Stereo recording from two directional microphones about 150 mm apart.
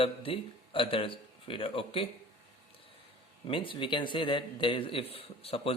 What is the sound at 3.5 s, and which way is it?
A man's voice, 35° left (ahead or behind).